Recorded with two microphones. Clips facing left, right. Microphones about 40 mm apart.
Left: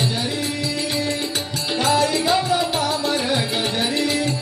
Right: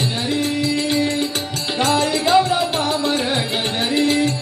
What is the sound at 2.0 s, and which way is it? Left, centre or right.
Music, centre.